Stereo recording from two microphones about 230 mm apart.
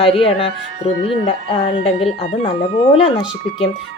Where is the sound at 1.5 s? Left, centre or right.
Left.